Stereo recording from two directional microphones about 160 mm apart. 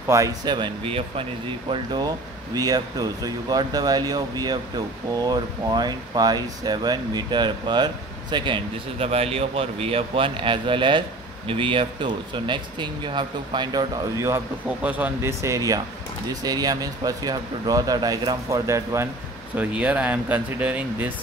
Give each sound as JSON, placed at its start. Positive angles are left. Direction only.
{"t": 0.1, "sound": "speech", "side_deg": -20}
{"t": 2.5, "sound": "speech", "side_deg": -25}
{"t": 19.5, "sound": "speech", "side_deg": -10}